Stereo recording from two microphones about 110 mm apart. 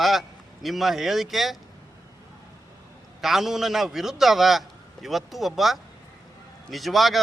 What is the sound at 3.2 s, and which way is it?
A man's voice, 5° right (ahead or behind).